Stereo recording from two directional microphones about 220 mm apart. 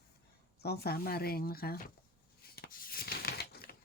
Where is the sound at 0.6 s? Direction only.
45° left (ahead or behind).